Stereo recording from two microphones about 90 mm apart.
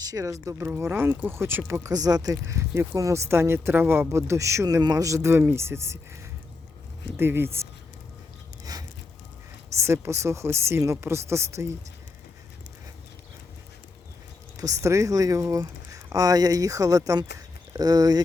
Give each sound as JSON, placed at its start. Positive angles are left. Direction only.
{"t": 0.0, "sound": "speech", "side_deg": -40}
{"t": 1.9, "sound": "speech", "side_deg": -45}
{"t": 7.2, "sound": "speech", "side_deg": -25}
{"t": 8.7, "sound": "a sound", "side_deg": -40}
{"t": 9.7, "sound": "speech", "side_deg": -30}
{"t": 14.5, "sound": "speech", "side_deg": -40}